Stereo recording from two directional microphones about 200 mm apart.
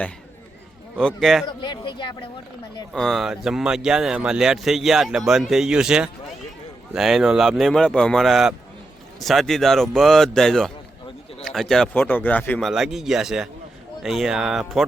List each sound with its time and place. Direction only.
0.9 s a man's voice: centre (ahead or behind)
1.6 s speech: 20° left (ahead or behind)
2.9 s a man's voice: centre (ahead or behind)